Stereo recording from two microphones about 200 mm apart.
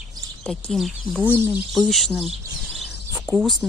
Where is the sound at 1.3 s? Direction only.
10° right (ahead or behind).